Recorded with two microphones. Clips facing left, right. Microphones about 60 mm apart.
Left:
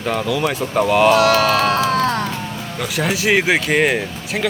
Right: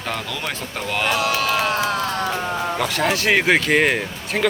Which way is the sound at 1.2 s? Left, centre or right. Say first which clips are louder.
Left 6 dB; left.